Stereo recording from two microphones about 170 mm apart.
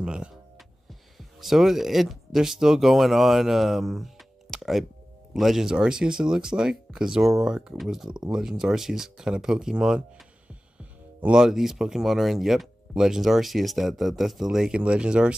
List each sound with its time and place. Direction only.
0.0 s speech: 5° right (ahead or behind)
1.4 s speech: centre (ahead or behind)
11.2 s speech: 5° right (ahead or behind)